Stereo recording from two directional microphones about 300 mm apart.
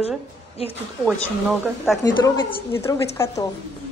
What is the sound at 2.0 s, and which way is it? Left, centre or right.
A woman's voice, centre.